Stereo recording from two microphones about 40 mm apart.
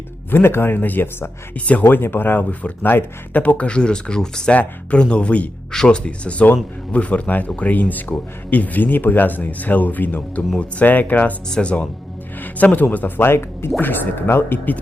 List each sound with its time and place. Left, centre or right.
0.3 s speech: left
0.8 s speech: left
1.5 s speech: left
1.9 s speech: left; by 4.5 s centre
4.5 s speech: left
5.7 s speech: centre
6.1 s speech: left
7.3 s speech: left
11.6 s speech: left
12.4 s speech: left
13.2 s speech: left
13.7 s speech: left